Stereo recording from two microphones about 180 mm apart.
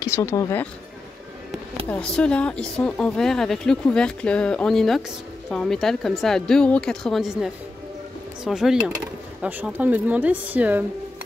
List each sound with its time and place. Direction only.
0.0 s speech: 15° left (ahead or behind)
1.9 s speech: 5° left (ahead or behind); by 10.9 s 10° right (ahead or behind)